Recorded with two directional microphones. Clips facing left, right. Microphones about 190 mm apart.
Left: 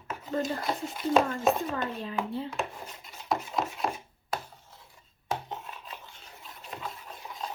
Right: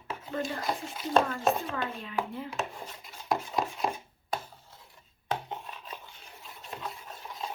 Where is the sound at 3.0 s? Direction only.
Centre (ahead or behind).